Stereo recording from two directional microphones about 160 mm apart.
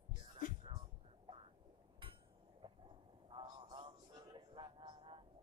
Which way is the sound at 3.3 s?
30° right (ahead or behind).